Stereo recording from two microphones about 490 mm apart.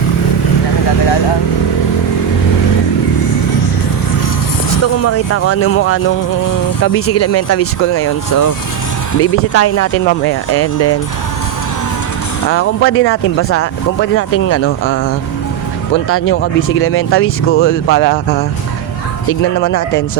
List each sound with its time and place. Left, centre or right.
5.0 s speech: left
8.3 s speech: left
9.2 s speech: left
12.5 s speech: left
16.0 s speech: left